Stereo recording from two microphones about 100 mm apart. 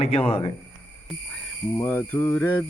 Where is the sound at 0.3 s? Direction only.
90° left.